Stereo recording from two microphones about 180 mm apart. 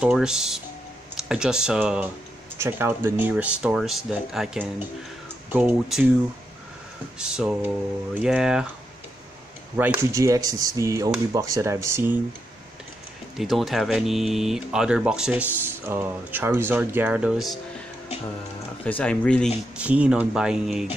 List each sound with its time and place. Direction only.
0.0 s speech: 5° right (ahead or behind)
7.2 s speech: 5° right (ahead or behind)
9.8 s speech: 15° right (ahead or behind)
13.4 s speech: centre (ahead or behind)
18.9 s speech: 5° left (ahead or behind)
19.8 s speech: 10° right (ahead or behind)